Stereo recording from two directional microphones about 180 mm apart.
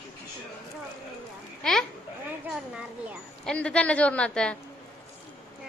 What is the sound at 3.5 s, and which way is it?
A woman's voice, 5° left (ahead or behind).